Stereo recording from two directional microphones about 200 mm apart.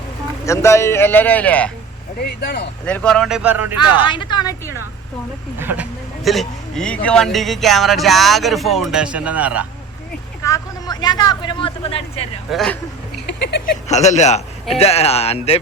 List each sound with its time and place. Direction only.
0.4 s speech: 15° left (ahead or behind)
2.2 s speech: 55° left (ahead or behind)
2.8 s a man's voice: 5° left (ahead or behind)
4.0 s a woman's voice: 25° left (ahead or behind)
5.5 s a man's voice: 10° right (ahead or behind)
10.4 s speech: 20° left (ahead or behind)
12.5 s a man's voice: centre (ahead or behind)
13.2 s a sound: 60° left (ahead or behind)
13.8 s a man's voice: 35° left (ahead or behind)